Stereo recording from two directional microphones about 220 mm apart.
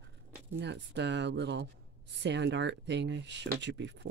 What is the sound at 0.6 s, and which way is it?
Speech, 55° right (ahead or behind).